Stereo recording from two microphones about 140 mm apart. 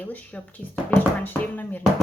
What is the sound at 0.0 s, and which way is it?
Speech, 10° left (ahead or behind).